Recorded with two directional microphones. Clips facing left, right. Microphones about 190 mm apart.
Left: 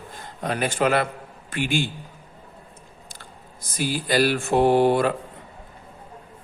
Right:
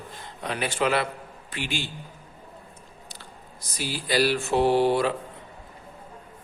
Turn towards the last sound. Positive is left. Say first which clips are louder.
# left 3 dB
turn(degrees=50)  # may be behind; listen again after turning